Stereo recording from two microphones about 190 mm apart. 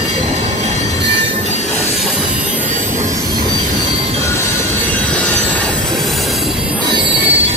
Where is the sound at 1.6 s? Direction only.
10° left (ahead or behind).